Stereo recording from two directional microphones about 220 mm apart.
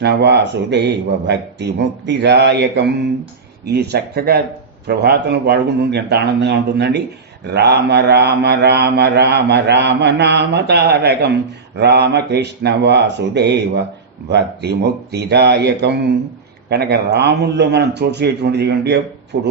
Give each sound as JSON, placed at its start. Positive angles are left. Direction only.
{"t": 0.0, "sound": "speech", "side_deg": -50}